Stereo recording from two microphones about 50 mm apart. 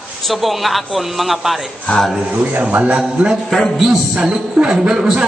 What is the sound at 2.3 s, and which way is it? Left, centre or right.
Speech, right.